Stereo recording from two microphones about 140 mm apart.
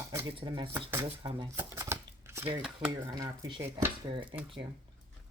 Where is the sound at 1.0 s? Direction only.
40° right (ahead or behind).